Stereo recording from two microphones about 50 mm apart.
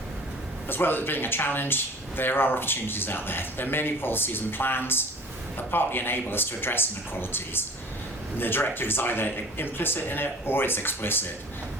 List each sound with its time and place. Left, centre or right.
0.7 s speech: left